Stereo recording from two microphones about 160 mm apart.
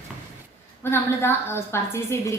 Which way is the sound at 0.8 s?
15° left (ahead or behind).